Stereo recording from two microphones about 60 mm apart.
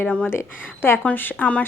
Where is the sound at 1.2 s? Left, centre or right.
Left.